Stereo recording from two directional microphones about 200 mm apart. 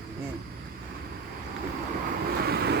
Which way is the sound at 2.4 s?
55° right (ahead or behind).